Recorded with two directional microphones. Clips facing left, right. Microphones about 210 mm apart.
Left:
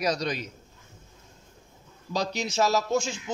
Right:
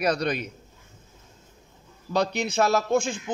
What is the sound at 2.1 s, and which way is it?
Speech, 60° right (ahead or behind).